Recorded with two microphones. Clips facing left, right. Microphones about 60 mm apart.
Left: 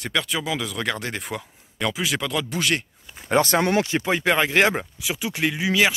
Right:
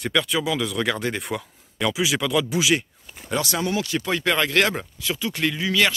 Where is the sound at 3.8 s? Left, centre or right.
Left.